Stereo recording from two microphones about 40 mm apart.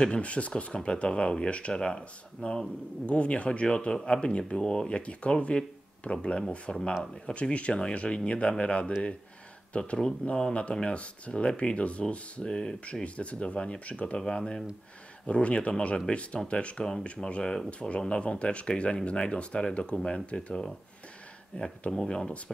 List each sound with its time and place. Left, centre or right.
0.0 s speech: left
13.0 s speech: left
14.1 s speech: centre
21.9 s speech: centre